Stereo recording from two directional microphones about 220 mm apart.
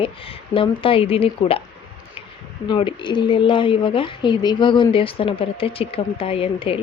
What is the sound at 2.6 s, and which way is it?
Speech, 20° left (ahead or behind).